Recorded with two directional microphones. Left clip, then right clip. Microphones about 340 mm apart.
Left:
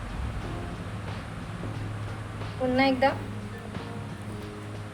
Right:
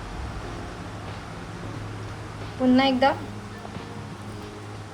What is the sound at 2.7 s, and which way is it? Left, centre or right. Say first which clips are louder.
Speech: right 2 dB; right.